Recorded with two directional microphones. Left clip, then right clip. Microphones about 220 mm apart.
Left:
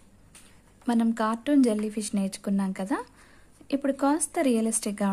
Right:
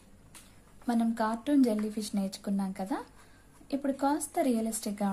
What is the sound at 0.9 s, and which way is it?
A woman's voice, 45° left (ahead or behind).